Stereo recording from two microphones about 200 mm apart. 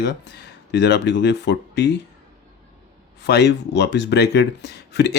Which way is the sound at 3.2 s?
55° left (ahead or behind).